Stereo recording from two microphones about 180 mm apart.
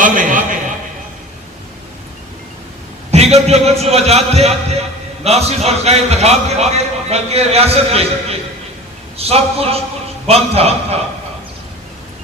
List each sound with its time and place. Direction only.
0.0 s a man's voice: 45° right (ahead or behind)
3.1 s a man's voice: 35° right (ahead or behind)